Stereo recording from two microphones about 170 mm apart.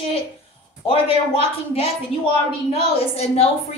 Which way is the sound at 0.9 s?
35° left (ahead or behind).